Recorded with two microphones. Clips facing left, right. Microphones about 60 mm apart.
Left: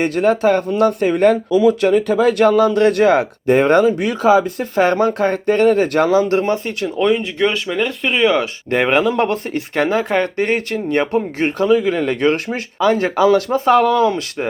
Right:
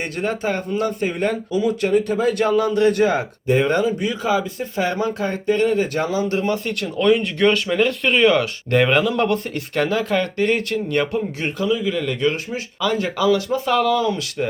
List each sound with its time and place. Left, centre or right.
0.0 s speech: left
6.8 s speech: centre; by 11.2 s left
11.3 s speech: left
12.3 s speech: left
12.8 s speech: left